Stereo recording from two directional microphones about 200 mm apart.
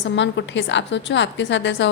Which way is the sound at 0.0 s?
65° left (ahead or behind).